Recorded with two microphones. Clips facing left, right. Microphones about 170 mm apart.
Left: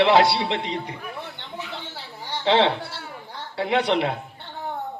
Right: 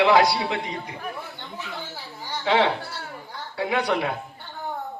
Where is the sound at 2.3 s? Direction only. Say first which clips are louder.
Left 2 dB; 25° left (ahead or behind).